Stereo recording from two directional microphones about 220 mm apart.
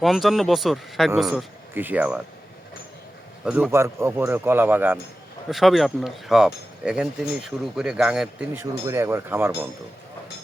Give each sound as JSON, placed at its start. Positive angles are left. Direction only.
{"t": 0.0, "sound": "speech", "side_deg": 0}
{"t": 3.4, "sound": "a man's voice", "side_deg": -5}